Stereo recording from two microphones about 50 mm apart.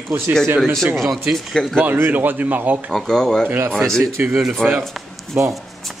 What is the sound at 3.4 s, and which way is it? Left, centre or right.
Speech, right.